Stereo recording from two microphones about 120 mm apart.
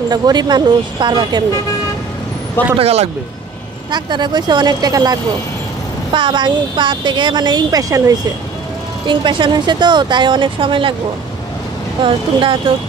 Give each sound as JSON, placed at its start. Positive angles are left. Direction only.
{"t": 0.1, "sound": "speech", "side_deg": -35}
{"t": 2.8, "sound": "speech", "side_deg": -55}
{"t": 3.9, "sound": "speech", "side_deg": -40}
{"t": 9.0, "sound": "speech", "side_deg": -40}
{"t": 12.0, "sound": "speech", "side_deg": -45}